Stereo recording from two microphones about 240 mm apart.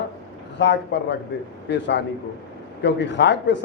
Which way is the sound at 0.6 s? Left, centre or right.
Left.